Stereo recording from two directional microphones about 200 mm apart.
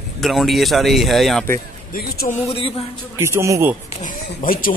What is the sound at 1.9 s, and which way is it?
Speech, 45° left (ahead or behind).